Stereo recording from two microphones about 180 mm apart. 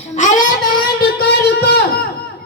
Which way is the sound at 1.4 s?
65° left (ahead or behind).